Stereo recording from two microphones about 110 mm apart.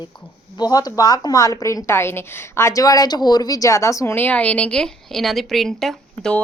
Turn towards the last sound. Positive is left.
turn(degrees=5)  # may be behind; listen again after turning